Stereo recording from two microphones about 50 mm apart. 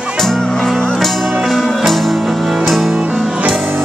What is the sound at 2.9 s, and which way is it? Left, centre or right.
Music, right.